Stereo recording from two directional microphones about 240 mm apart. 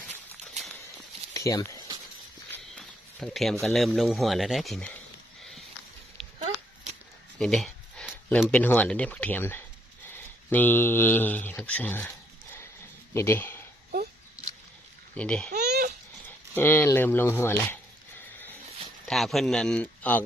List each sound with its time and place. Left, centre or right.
1.3 s a sound: centre
2.5 s speech: centre
7.3 s speech: centre
13.1 s speech: centre
15.1 s speech: centre
15.5 s a sound: right
16.6 s speech: centre
19.0 s speech: centre